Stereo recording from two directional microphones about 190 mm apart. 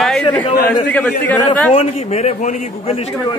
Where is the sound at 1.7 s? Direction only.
35° left (ahead or behind).